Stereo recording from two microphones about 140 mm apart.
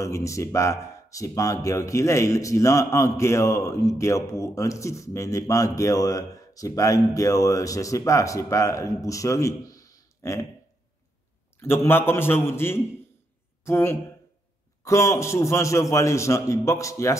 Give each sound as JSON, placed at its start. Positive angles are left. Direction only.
{"t": 0.0, "sound": "a man's voice", "side_deg": 20}
{"t": 11.5, "sound": "a man's voice", "side_deg": 15}